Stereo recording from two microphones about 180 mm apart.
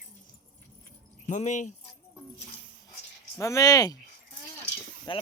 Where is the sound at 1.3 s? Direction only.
40° left (ahead or behind).